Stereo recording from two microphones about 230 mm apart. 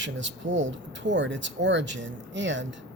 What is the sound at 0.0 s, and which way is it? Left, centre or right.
Speech, right.